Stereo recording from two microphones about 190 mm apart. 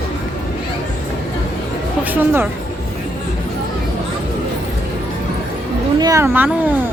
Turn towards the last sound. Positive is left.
turn(degrees=-10)  # may be behind; listen again after turning